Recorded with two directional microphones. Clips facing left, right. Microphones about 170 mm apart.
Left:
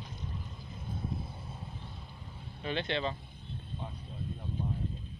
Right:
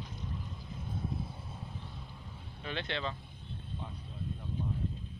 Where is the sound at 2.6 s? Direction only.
25° left (ahead or behind).